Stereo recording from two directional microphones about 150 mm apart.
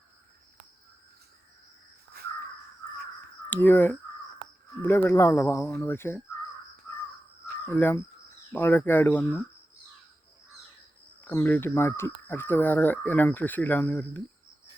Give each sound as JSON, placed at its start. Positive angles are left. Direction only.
{"t": 3.5, "sound": "speech", "side_deg": 15}
{"t": 7.6, "sound": "speech", "side_deg": 15}
{"t": 11.2, "sound": "speech", "side_deg": 15}